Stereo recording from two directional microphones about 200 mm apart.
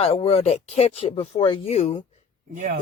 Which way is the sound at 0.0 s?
30° left (ahead or behind).